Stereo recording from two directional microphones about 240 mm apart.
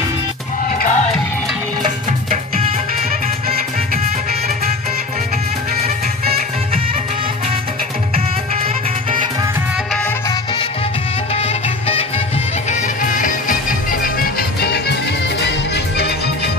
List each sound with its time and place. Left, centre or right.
0.7 s music: left
11.3 s music: left